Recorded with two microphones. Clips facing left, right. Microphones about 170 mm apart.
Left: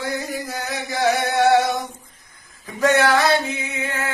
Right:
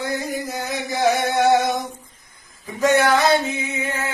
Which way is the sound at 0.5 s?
20° right (ahead or behind).